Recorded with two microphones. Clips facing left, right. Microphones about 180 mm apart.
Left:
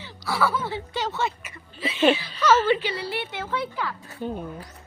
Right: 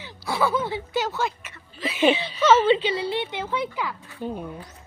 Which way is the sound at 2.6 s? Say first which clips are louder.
Right 3 dB; 20° right (ahead or behind).